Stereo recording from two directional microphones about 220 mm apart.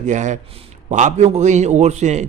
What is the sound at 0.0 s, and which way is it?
A man's voice, 35° right (ahead or behind).